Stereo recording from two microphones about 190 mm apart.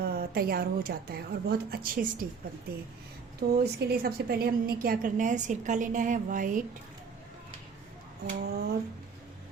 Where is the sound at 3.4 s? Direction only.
50° right (ahead or behind).